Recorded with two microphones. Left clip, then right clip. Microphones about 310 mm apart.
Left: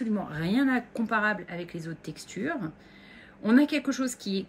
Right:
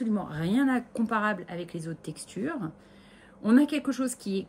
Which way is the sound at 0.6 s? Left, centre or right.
Centre.